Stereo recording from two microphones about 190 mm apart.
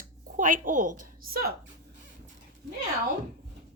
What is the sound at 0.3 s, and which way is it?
A woman's voice, 45° right (ahead or behind).